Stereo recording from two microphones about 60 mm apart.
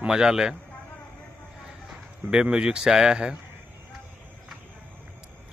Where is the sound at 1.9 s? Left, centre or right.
Centre.